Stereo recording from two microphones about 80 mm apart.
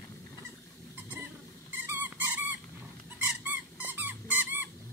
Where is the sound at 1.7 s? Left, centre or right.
Right.